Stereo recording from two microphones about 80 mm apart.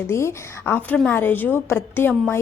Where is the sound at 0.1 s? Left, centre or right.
Left.